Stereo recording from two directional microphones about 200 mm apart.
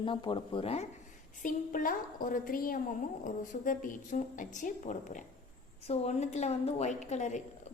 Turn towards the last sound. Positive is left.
turn(degrees=35)  # may be behind; listen again after turning